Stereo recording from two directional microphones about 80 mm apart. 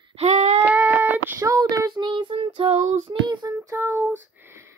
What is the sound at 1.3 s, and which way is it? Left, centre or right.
Child singing, right.